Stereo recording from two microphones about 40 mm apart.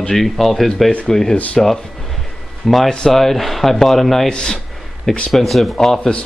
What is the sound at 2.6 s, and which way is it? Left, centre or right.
Speech, centre.